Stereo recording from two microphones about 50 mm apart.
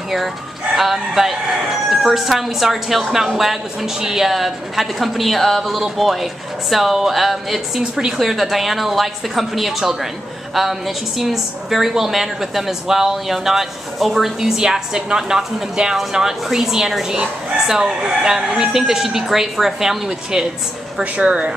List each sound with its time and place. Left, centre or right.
0.7 s a woman's voice: centre
7.8 s a woman's voice: centre
8.2 s a woman's voice: centre
21.0 s speech: right